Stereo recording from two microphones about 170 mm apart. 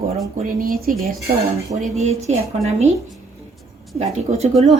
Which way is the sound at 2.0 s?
40° right (ahead or behind).